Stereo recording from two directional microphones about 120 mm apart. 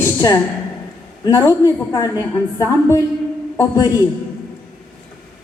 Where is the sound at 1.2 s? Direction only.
30° left (ahead or behind).